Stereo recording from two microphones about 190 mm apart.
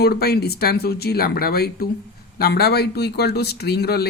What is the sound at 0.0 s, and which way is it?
Speech, 55° left (ahead or behind).